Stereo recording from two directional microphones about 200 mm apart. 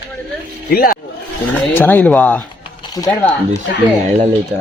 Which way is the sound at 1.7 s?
10° left (ahead or behind).